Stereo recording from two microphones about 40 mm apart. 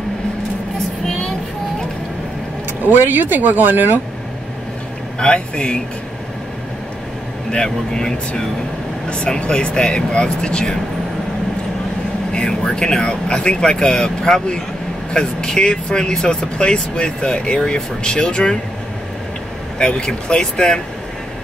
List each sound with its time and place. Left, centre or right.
2.9 s speech: right
5.2 s speech: left
7.5 s speech: centre
9.1 s speech: left
12.4 s vehicle: left
13.0 s speech: left
19.8 s speech: left